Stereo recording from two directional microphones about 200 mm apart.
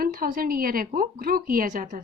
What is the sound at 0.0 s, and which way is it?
A woman's voice, 45° right (ahead or behind).